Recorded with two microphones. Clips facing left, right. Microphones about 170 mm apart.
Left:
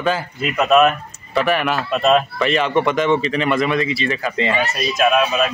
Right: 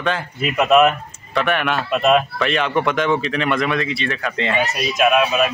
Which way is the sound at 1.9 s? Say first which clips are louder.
Even; 10° right (ahead or behind).